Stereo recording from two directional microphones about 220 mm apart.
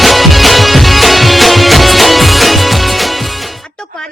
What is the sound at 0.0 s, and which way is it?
Music, centre (ahead or behind).